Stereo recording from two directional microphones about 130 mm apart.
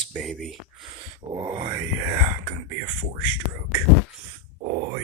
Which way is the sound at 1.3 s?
40° right (ahead or behind).